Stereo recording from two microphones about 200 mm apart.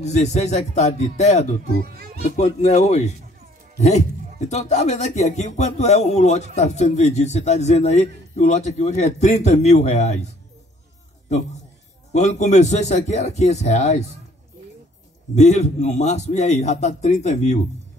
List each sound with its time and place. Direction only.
0.0 s speech: 35° left (ahead or behind)
15.3 s speech: 35° left (ahead or behind)